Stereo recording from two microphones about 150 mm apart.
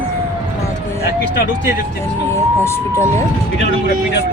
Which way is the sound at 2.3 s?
15° left (ahead or behind).